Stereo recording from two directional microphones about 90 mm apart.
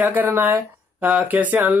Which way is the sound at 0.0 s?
20° right (ahead or behind).